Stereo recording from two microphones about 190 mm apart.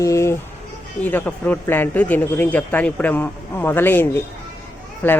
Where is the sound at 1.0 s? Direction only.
10° left (ahead or behind).